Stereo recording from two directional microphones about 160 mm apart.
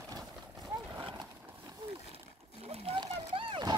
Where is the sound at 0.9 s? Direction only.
25° right (ahead or behind).